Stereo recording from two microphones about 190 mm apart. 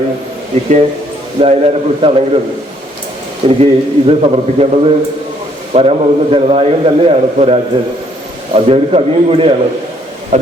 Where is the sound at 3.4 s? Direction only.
30° right (ahead or behind).